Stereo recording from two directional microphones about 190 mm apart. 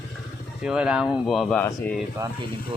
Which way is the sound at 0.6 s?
5° right (ahead or behind).